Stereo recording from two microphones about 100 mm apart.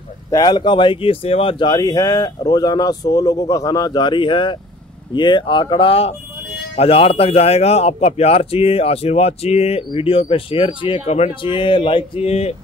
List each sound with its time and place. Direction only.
0.3 s speech: 45° left (ahead or behind); by 1.7 s 65° left (ahead or behind)
1.7 s a man's voice: 40° left (ahead or behind); by 12.5 s 90° left